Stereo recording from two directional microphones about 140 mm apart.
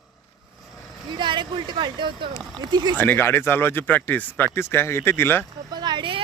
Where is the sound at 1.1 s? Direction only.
35° right (ahead or behind).